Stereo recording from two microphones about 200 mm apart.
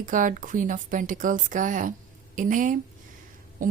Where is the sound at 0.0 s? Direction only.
40° right (ahead or behind).